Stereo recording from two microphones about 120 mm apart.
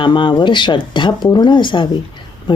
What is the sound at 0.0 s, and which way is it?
Speech, 45° left (ahead or behind).